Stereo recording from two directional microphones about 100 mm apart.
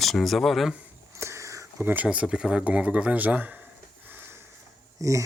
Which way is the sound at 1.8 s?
20° right (ahead or behind).